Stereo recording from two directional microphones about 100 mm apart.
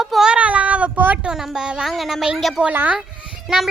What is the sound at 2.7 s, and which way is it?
Speech, 20° right (ahead or behind).